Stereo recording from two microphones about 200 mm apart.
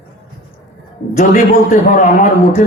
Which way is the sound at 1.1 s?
40° left (ahead or behind).